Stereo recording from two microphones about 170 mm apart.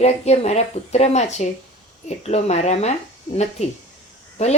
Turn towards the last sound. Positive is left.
turn(degrees=40)  # may be behind; listen again after turning